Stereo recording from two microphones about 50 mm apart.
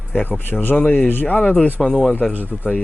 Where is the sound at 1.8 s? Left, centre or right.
Centre.